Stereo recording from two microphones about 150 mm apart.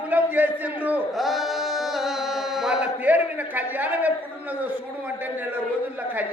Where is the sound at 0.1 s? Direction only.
10° right (ahead or behind).